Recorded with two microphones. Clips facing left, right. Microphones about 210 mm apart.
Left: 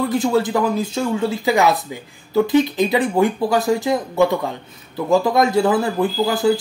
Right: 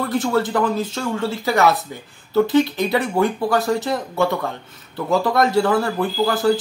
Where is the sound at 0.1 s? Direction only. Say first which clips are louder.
Left 2 dB; 15° left (ahead or behind).